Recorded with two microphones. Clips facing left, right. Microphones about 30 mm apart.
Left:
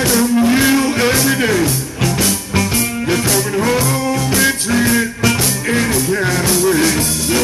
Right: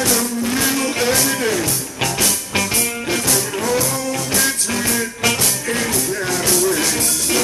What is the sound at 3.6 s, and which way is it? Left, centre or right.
Music, left.